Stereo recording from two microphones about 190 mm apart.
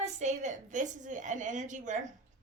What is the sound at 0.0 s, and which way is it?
A woman's voice, 40° right (ahead or behind).